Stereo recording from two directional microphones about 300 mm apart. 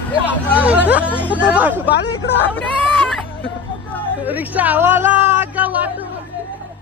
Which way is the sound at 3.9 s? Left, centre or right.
Centre.